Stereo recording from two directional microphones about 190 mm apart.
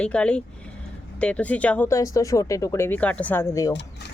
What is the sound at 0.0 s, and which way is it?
Speech, 5° left (ahead or behind).